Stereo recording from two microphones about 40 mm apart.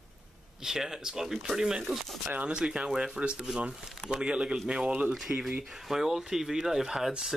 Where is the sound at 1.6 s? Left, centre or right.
Right.